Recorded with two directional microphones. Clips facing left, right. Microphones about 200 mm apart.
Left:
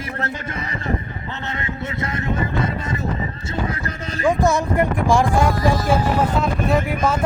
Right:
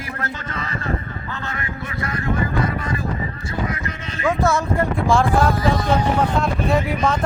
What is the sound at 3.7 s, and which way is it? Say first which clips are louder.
Speech: left 1 dB; 35° left (ahead or behind).